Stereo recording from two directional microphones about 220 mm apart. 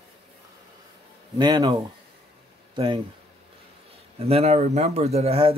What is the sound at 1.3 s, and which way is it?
Speech, 20° right (ahead or behind).